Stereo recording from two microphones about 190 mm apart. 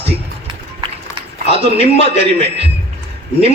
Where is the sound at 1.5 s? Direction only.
30° right (ahead or behind).